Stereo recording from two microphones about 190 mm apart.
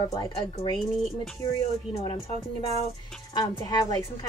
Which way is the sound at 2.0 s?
30° left (ahead or behind).